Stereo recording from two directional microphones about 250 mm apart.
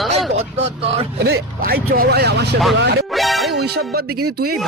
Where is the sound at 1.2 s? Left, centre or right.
Right.